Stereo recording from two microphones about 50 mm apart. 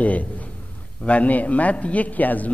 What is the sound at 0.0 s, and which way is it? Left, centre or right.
A man's voice, left.